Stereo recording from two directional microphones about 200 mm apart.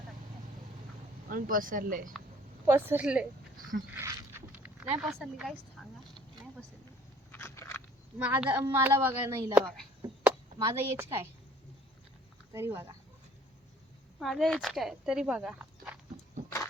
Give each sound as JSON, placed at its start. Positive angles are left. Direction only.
{"t": 1.3, "sound": "speech", "side_deg": -45}
{"t": 2.6, "sound": "a woman's voice", "side_deg": -10}
{"t": 5.8, "sound": "vehicle", "side_deg": 0}
{"t": 7.3, "sound": "biting", "side_deg": 10}
{"t": 8.2, "sound": "a woman's voice", "side_deg": -5}
{"t": 12.5, "sound": "a woman's voice", "side_deg": -10}
{"t": 14.2, "sound": "speech", "side_deg": 0}